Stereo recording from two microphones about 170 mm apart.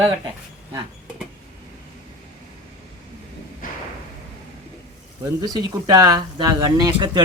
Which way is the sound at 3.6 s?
55° left (ahead or behind).